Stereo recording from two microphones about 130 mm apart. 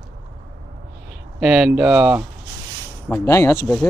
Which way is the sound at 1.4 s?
5° right (ahead or behind).